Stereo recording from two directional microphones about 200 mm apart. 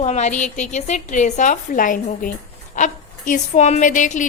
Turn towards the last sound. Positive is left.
turn(degrees=40)  # may be behind; listen again after turning